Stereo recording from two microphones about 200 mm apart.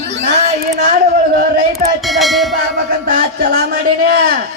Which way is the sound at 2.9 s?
50° right (ahead or behind).